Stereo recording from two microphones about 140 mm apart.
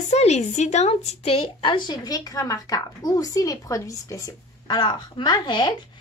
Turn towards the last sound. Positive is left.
turn(degrees=30)  # may be behind; listen again after turning